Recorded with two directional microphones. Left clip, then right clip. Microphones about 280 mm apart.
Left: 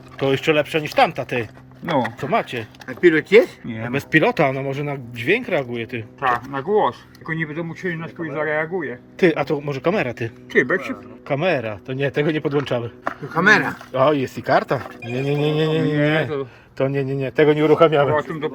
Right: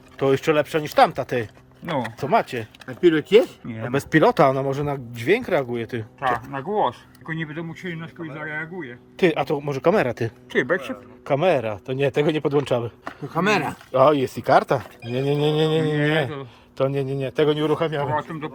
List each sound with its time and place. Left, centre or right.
0.2 s a man's voice: centre
3.8 s a man's voice: centre
13.3 s speech: right
13.9 s a man's voice: centre
18.1 s a man's voice: centre